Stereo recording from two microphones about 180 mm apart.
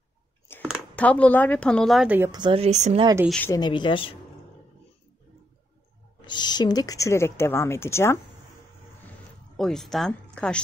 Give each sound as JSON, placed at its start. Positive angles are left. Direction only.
{"t": 0.5, "sound": "a sound", "side_deg": 10}
{"t": 0.9, "sound": "a woman's voice", "side_deg": 10}
{"t": 2.3, "sound": "speech", "side_deg": -30}
{"t": 3.3, "sound": "speech", "side_deg": 5}
{"t": 3.5, "sound": "speech", "side_deg": 25}
{"t": 6.2, "sound": "speech", "side_deg": 25}
{"t": 9.6, "sound": "a woman's voice", "side_deg": 0}